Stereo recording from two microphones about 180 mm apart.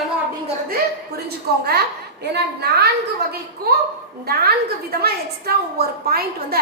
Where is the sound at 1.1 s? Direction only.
60° right (ahead or behind).